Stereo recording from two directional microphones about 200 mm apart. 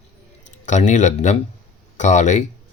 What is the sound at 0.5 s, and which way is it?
Speech, 35° left (ahead or behind).